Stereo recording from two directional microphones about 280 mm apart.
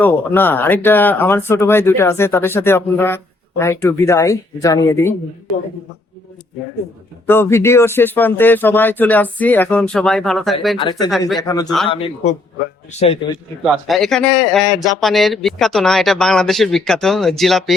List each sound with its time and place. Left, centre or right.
0.0 s speech: centre
7.3 s speech: centre
10.8 s speech: centre
13.7 s a man's voice: centre